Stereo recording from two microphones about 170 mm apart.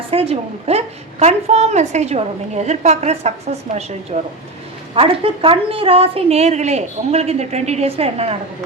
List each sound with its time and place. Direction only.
0.1 s a woman's voice: 35° right (ahead or behind)
4.9 s a woman's voice: 30° right (ahead or behind)